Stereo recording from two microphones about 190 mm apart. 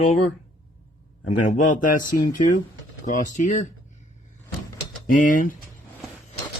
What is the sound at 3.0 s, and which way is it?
Speech, 40° left (ahead or behind).